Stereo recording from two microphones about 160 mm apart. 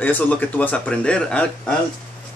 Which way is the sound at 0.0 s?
10° left (ahead or behind).